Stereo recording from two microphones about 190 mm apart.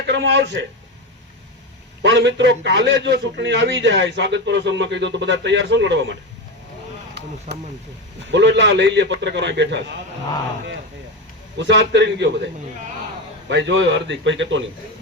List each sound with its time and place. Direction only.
0.1 s a man's voice: 70° right (ahead or behind)
2.0 s a man's voice: 70° right (ahead or behind)
7.1 s a sound: 60° right (ahead or behind)
8.2 s a man's voice: 70° right (ahead or behind)
11.5 s a man's voice: 70° right (ahead or behind)
13.5 s a man's voice: 70° right (ahead or behind)